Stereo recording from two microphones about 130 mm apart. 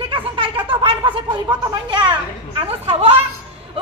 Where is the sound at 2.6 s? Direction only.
50° right (ahead or behind).